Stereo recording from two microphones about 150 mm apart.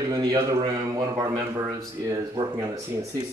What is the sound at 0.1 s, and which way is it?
Speech, 25° right (ahead or behind).